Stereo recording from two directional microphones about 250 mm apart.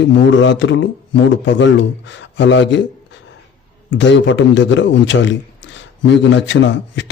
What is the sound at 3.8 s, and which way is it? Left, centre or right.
A man's voice, left.